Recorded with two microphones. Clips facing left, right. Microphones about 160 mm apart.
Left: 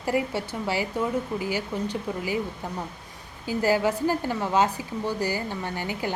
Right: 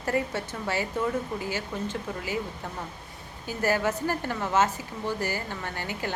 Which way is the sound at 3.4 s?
15° left (ahead or behind).